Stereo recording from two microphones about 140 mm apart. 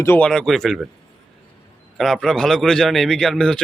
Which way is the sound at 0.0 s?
15° left (ahead or behind).